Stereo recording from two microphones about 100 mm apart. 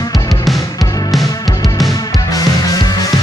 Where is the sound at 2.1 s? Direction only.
35° left (ahead or behind).